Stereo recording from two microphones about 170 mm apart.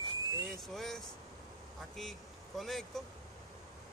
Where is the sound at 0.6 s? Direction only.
Centre (ahead or behind).